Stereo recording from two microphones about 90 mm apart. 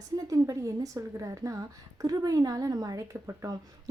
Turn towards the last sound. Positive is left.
turn(degrees=-40)  # may be behind; listen again after turning